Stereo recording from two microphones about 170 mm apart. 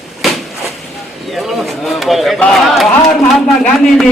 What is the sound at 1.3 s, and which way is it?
Speech, centre (ahead or behind).